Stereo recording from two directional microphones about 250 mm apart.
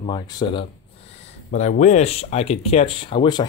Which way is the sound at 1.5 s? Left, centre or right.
Left.